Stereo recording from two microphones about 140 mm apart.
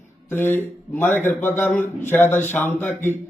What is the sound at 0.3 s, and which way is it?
A man's voice, 15° left (ahead or behind).